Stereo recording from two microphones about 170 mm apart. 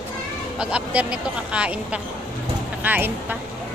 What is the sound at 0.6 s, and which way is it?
Speech, 5° right (ahead or behind).